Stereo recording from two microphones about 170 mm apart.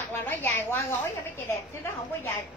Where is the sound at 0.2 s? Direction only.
10° left (ahead or behind).